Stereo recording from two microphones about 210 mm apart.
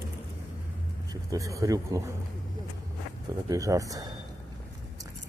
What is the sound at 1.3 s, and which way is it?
Speech, 15° right (ahead or behind).